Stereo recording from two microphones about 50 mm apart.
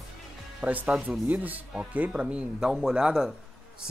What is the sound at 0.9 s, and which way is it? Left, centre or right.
Speech, right.